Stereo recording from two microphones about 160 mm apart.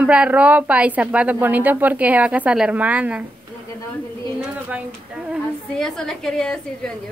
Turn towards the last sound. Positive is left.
turn(degrees=5)  # may be behind; listen again after turning